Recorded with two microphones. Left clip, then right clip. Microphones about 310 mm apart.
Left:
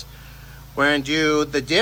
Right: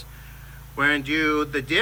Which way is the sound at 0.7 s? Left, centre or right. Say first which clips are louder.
Left 2 dB; centre.